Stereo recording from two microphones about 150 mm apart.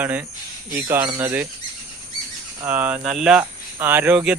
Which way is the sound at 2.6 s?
10° right (ahead or behind).